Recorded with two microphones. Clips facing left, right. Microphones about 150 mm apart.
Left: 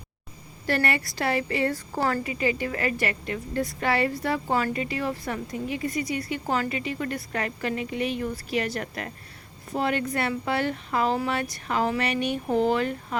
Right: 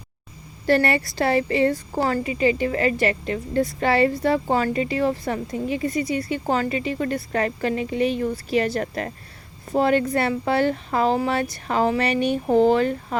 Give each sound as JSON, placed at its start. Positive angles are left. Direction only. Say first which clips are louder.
{"t": 0.7, "sound": "a woman's voice", "louder": "right 6 dB", "side_deg": -30}